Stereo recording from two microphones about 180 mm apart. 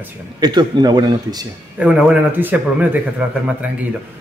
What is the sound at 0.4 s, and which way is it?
Speech, 25° right (ahead or behind).